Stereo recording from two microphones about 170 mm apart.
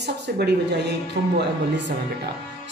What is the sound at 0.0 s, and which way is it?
A woman's voice, 80° right.